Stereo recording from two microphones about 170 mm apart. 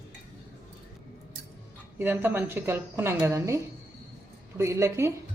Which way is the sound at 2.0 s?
10° right (ahead or behind).